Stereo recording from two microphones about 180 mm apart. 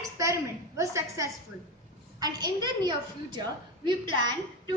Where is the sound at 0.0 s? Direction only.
15° right (ahead or behind).